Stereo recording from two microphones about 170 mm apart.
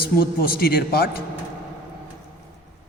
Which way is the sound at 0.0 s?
60° left (ahead or behind).